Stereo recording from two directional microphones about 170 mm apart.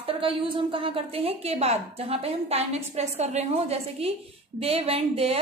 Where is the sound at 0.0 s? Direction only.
30° right (ahead or behind).